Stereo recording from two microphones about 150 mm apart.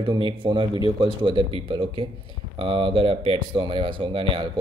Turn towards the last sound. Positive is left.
turn(degrees=-35)  # may be behind; listen again after turning